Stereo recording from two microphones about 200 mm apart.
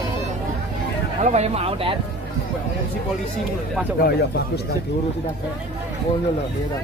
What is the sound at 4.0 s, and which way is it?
Speech, 55° left (ahead or behind).